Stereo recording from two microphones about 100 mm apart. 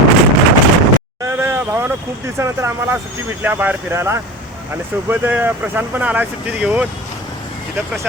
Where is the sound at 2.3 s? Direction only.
30° right (ahead or behind).